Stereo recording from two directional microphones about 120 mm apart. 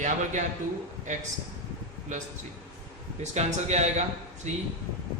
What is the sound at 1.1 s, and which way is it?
A man's voice, 90° right.